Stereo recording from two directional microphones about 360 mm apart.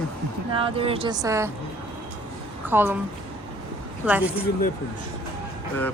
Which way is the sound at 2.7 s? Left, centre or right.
Centre.